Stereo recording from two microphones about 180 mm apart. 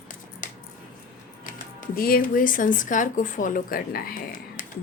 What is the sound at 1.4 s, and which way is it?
Speech, 50° left (ahead or behind).